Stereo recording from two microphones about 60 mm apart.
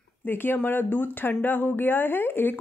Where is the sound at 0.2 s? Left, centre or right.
Left.